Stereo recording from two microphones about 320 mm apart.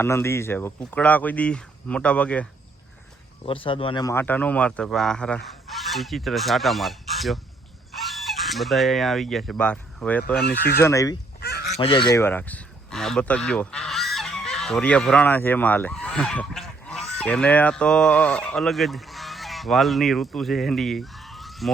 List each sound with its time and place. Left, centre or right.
0.0 s speech: centre
3.4 s speech: centre
7.9 s fowl: centre
10.8 s speech: centre
11.3 s goose: left
11.8 s speech: centre